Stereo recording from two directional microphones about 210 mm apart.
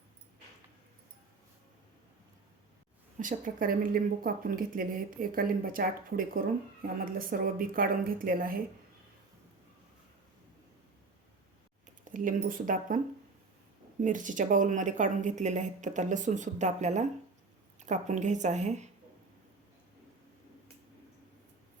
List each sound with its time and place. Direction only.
3.2 s speech: 40° right (ahead or behind)
11.9 s speech: 40° right (ahead or behind)
14.0 s a woman's voice: 40° right (ahead or behind)